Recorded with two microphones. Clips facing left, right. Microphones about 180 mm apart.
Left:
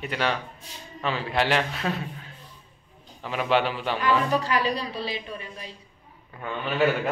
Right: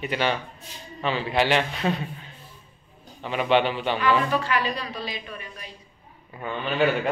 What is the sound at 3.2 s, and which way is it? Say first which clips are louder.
Speech: right 2 dB; centre (ahead or behind).